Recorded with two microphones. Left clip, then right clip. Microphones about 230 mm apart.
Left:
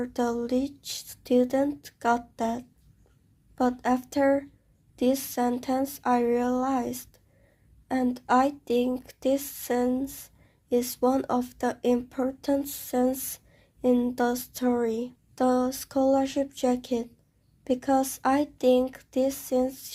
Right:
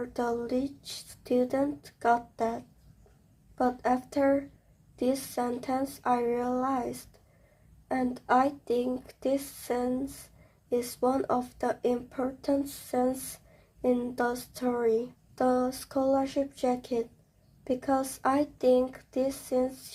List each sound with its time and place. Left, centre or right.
0.0 s speech: left